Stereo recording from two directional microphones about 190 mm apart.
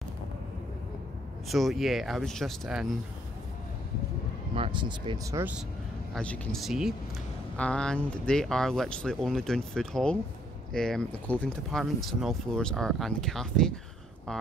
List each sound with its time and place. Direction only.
1.5 s speech: centre (ahead or behind)
4.6 s speech: 25° right (ahead or behind)
6.1 s speech: 5° left (ahead or behind)